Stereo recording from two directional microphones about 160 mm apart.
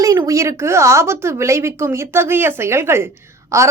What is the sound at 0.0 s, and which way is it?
A woman's voice, 20° right (ahead or behind).